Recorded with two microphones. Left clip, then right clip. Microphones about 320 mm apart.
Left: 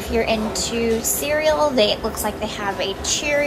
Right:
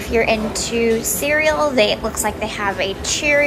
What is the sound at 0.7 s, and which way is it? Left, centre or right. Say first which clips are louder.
Music: right 5 dB; left.